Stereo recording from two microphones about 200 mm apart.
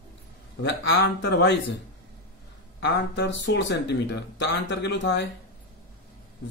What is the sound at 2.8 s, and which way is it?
Speech, 60° left (ahead or behind).